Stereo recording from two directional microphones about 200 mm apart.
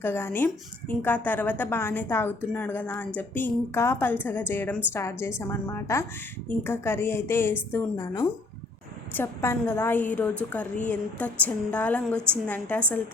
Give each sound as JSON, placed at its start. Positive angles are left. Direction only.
{"t": 0.0, "sound": "a woman's voice", "side_deg": 10}